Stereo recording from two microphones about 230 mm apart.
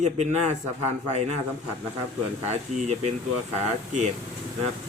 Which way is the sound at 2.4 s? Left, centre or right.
Right.